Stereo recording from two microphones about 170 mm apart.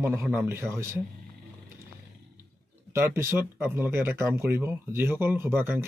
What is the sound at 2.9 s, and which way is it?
Speech, 15° right (ahead or behind).